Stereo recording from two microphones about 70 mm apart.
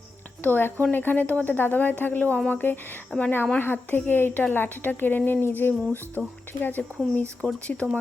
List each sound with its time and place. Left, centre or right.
0.4 s speech: left